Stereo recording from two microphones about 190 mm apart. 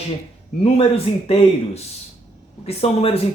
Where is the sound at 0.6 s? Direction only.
30° left (ahead or behind).